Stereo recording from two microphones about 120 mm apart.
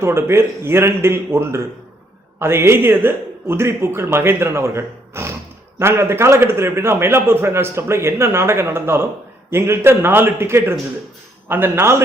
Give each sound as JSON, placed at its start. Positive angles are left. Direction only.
{"t": 0.0, "sound": "a man's voice", "side_deg": -20}